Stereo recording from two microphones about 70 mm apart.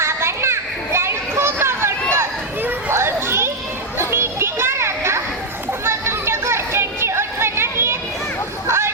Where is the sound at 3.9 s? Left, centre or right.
Right.